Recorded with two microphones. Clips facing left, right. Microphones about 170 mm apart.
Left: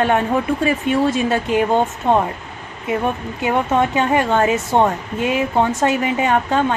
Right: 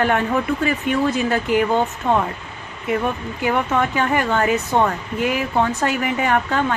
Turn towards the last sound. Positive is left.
turn(degrees=20)  # may be behind; listen again after turning